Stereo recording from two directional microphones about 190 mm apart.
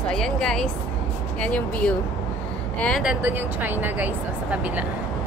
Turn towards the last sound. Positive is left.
turn(degrees=-10)  # may be behind; listen again after turning